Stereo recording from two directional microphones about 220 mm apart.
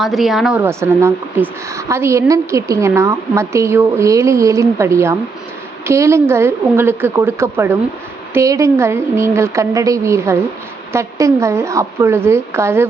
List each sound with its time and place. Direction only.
0.0 s a woman's voice: centre (ahead or behind)